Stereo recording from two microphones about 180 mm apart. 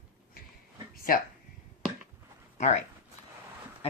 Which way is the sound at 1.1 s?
55° left (ahead or behind).